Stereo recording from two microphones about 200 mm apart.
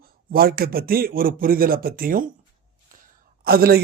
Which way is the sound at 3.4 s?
50° right (ahead or behind).